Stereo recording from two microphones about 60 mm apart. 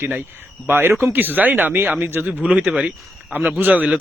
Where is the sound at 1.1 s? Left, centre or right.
Right; by 2.9 s centre.